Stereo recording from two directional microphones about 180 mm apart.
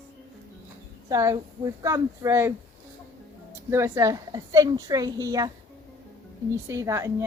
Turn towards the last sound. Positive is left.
turn(degrees=-15)  # may be behind; listen again after turning